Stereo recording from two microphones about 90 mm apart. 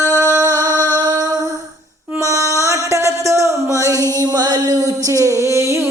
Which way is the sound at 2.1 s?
35° right (ahead or behind).